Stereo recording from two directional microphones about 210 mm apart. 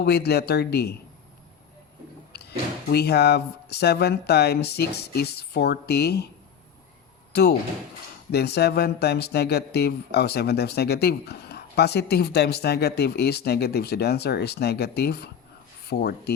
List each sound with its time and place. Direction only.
0.0 s speech: 50° left (ahead or behind)
2.3 s a sound: 50° left (ahead or behind)
2.9 s speech: 50° left (ahead or behind)
8.3 s speech: 50° left (ahead or behind)